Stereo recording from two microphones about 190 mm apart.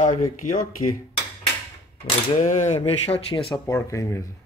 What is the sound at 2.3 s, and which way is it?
Speech, 40° left (ahead or behind).